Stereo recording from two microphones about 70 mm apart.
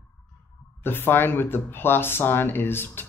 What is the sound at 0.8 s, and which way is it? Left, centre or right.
Speech, left.